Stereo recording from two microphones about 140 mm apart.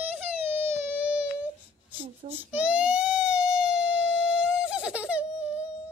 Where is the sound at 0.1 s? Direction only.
15° right (ahead or behind).